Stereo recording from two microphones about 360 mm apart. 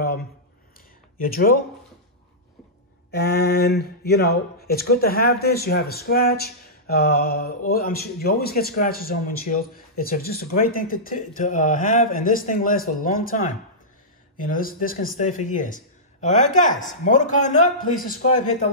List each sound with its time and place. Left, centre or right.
1.2 s speech: left
3.1 s speech: left